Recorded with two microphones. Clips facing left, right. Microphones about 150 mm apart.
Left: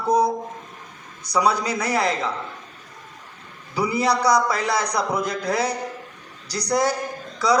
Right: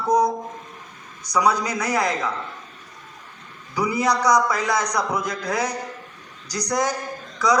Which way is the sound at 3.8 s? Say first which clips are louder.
Even; 30° left (ahead or behind).